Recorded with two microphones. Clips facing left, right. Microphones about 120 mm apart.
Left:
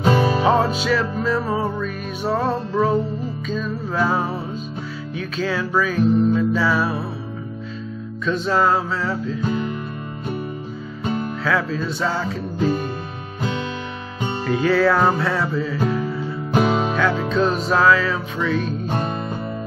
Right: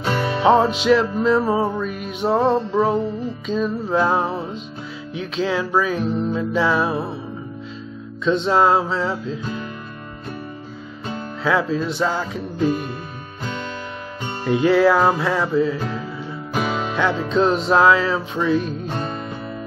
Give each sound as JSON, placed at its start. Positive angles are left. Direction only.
{"t": 0.4, "sound": "music", "side_deg": -25}
{"t": 8.3, "sound": "music", "side_deg": -25}
{"t": 11.4, "sound": "music", "side_deg": -20}
{"t": 14.4, "sound": "music", "side_deg": -20}
{"t": 16.5, "sound": "music", "side_deg": 30}
{"t": 16.9, "sound": "music", "side_deg": -25}